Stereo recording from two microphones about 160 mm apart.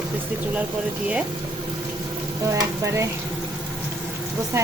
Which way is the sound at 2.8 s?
20° right (ahead or behind).